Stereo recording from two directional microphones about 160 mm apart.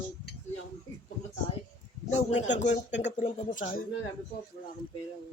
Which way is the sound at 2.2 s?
45° left (ahead or behind).